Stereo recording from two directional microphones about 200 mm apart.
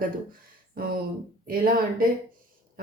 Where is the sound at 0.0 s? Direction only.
45° right (ahead or behind).